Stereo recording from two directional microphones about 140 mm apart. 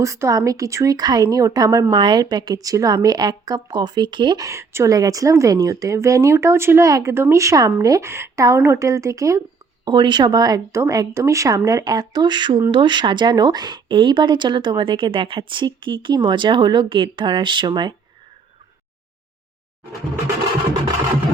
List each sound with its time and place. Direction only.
0.0 s speech: 20° right (ahead or behind)
9.8 s speech: 35° right (ahead or behind)